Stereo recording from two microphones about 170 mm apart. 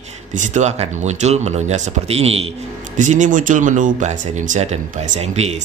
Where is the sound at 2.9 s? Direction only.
45° right (ahead or behind).